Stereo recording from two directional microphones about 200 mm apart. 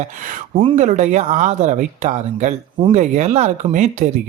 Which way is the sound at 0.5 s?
30° right (ahead or behind).